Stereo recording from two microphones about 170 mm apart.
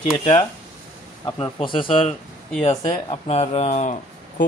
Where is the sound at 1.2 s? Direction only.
30° left (ahead or behind).